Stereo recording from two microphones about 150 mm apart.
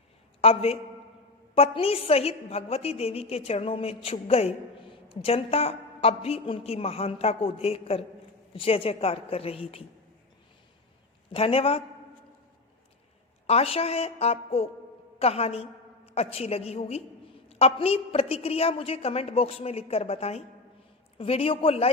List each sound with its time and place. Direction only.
0.4 s a woman's voice: 40° left (ahead or behind)
11.3 s a woman's voice: 40° left (ahead or behind)
13.5 s a woman's voice: 40° left (ahead or behind)